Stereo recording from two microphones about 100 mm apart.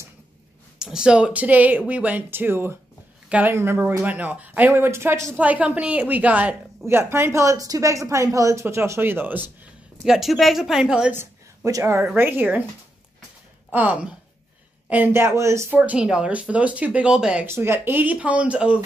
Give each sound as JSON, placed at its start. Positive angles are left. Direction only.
{"t": 0.7, "sound": "speech", "side_deg": -5}
{"t": 5.4, "sound": "speech", "side_deg": -15}
{"t": 10.0, "sound": "speech", "side_deg": -5}
{"t": 11.1, "sound": "speech", "side_deg": -30}
{"t": 13.7, "sound": "speech", "side_deg": -15}
{"t": 15.8, "sound": "speech", "side_deg": -10}
{"t": 17.5, "sound": "speech", "side_deg": -25}